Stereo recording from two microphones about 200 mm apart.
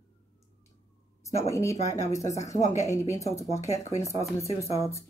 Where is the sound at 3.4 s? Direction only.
35° left (ahead or behind).